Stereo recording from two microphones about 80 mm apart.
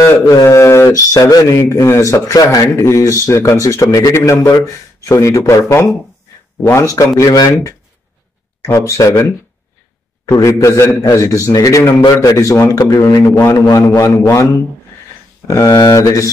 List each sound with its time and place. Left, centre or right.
0.0 s speech: left
10.4 s speech: left